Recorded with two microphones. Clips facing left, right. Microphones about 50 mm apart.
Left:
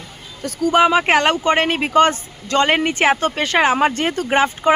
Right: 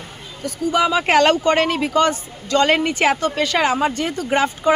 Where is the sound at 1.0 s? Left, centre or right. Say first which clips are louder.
Right 1 dB; left.